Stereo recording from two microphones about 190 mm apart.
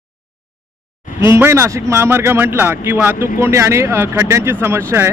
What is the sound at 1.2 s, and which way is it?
Speech, 15° right (ahead or behind).